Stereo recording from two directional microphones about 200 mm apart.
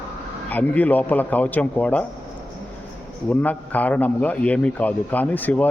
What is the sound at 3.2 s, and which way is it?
Speech, 10° left (ahead or behind).